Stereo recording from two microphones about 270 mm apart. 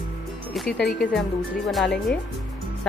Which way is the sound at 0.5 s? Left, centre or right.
Centre.